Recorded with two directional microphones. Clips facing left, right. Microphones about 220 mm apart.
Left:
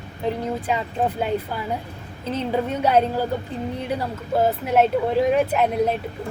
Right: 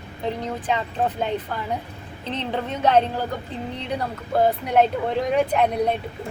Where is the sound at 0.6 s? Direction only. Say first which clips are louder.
Right 2 dB; 10° left (ahead or behind).